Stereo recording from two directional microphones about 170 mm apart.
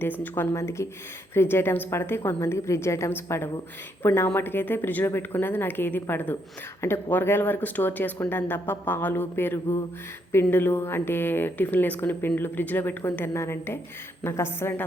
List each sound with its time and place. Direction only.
0.2 s a woman's voice: 15° left (ahead or behind)